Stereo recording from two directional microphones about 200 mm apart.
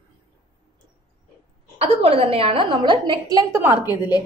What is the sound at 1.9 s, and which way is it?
A woman's voice, 30° right (ahead or behind).